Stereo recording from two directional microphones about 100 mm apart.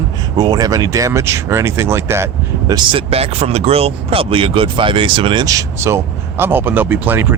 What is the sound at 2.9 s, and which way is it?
Speech, 90° right.